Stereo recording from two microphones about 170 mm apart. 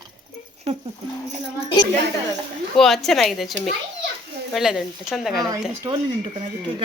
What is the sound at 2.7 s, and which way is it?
Speech, centre (ahead or behind).